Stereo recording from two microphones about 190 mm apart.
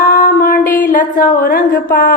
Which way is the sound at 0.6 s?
10° left (ahead or behind).